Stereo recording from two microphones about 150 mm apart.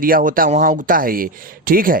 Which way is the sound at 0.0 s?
70° right (ahead or behind).